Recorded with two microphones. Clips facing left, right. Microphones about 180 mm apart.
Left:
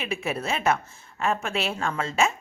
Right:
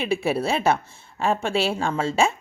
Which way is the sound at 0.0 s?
30° right (ahead or behind).